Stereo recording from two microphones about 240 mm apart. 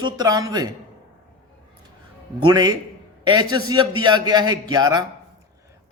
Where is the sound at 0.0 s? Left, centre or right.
Centre.